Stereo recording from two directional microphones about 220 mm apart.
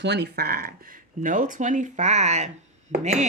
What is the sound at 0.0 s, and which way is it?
Speech, 50° right (ahead or behind).